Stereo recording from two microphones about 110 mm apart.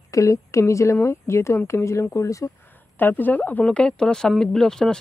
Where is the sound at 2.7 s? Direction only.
20° left (ahead or behind).